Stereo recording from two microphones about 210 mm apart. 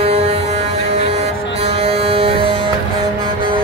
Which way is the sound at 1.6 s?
30° right (ahead or behind).